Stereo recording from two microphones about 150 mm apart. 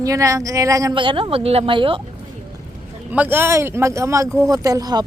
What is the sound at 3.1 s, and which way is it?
Speech, 10° right (ahead or behind).